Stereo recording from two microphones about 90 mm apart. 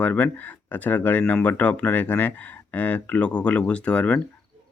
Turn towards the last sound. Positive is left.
turn(degrees=15)  # may be behind; listen again after turning